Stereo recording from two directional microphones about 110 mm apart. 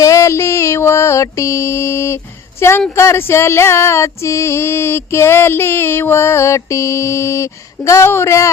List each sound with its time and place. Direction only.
0.0 s mantra: 30° left (ahead or behind)
2.9 s female singing: 25° left (ahead or behind)